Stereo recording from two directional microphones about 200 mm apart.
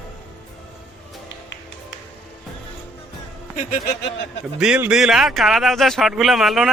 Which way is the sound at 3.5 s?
40° left (ahead or behind).